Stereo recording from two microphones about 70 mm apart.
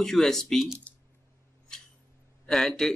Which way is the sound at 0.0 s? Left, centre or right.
Centre.